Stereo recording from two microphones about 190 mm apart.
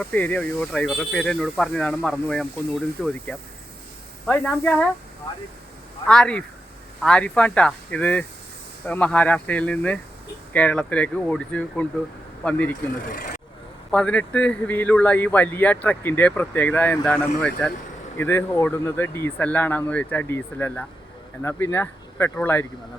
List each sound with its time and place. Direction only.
0.0 s speech: 10° left (ahead or behind)
6.1 s a man's voice: 5° left (ahead or behind)
13.1 s speech: 45° left (ahead or behind)
13.9 s a man's voice: 5° left (ahead or behind)